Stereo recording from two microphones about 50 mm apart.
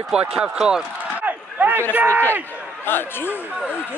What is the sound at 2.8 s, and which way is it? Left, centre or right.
Speech, left.